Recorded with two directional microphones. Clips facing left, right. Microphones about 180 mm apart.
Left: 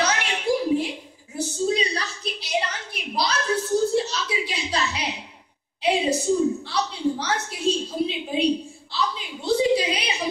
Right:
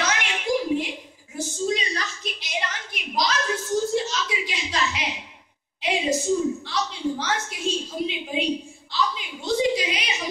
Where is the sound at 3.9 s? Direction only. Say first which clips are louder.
Left 2 dB; 35° left (ahead or behind).